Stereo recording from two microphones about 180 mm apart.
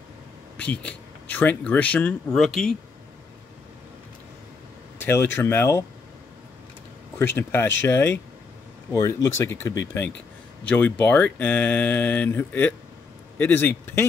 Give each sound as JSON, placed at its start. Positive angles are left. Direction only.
{"t": 0.6, "sound": "speech", "side_deg": 5}
{"t": 5.0, "sound": "speech", "side_deg": 10}
{"t": 7.3, "sound": "speech", "side_deg": 10}